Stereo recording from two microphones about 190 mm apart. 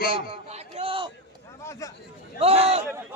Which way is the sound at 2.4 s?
30° right (ahead or behind).